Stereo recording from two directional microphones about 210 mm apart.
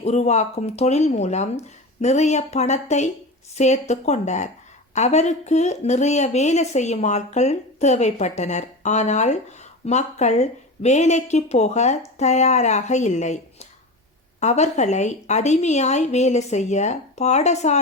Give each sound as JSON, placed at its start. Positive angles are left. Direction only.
{"t": 0.0, "sound": "speech", "side_deg": 30}